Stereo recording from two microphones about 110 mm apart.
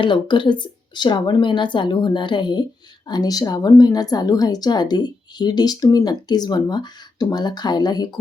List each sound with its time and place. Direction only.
0.0 s speech: 45° left (ahead or behind)